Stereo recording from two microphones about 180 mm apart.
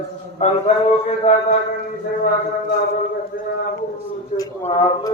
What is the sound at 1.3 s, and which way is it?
Speech, 35° left (ahead or behind).